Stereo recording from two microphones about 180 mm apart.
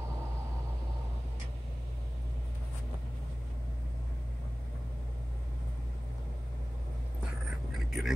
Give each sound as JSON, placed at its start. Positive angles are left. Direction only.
{"t": 7.7, "sound": "vehicle", "side_deg": 0}